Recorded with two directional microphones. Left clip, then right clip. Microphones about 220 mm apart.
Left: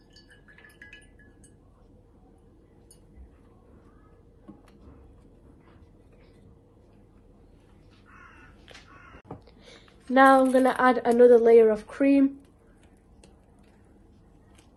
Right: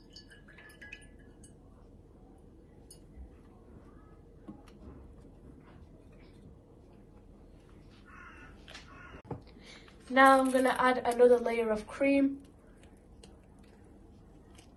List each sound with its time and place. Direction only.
9.6 s speech: 30° left (ahead or behind)